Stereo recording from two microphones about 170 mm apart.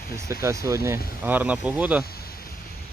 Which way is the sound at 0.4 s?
20° right (ahead or behind).